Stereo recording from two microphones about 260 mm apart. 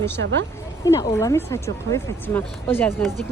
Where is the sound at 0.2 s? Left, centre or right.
Right.